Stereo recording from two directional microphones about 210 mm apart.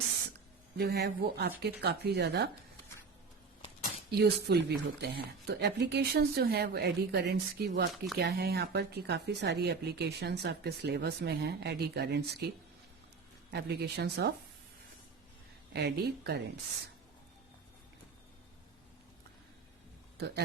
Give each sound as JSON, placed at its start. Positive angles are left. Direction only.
{"t": 0.8, "sound": "speech", "side_deg": -50}
{"t": 4.1, "sound": "speech", "side_deg": -50}
{"t": 13.5, "sound": "speech", "side_deg": -50}
{"t": 15.7, "sound": "speech", "side_deg": -50}
{"t": 20.1, "sound": "a man's voice", "side_deg": -50}